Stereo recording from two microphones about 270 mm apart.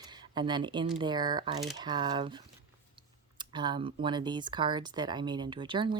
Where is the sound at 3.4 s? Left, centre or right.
Centre.